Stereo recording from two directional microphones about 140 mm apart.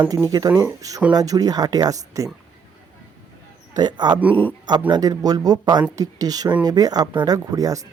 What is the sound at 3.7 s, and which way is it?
Speech, 30° right (ahead or behind).